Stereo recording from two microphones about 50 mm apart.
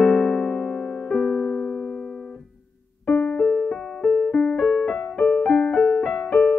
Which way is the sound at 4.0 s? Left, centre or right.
Centre.